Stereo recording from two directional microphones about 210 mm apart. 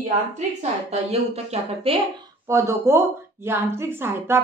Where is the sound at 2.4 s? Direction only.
15° right (ahead or behind).